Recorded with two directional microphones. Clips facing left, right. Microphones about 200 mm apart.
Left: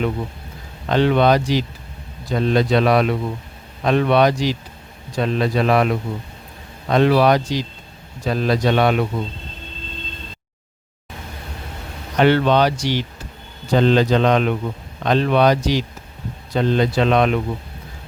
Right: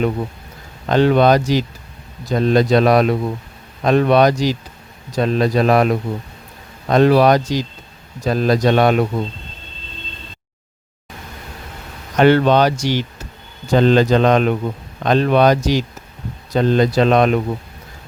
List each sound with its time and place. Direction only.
0.9 s speech: 45° right (ahead or behind)
12.1 s speech: 45° right (ahead or behind)